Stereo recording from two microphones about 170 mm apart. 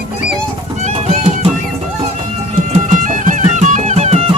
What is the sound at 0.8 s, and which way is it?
Music, 45° right (ahead or behind).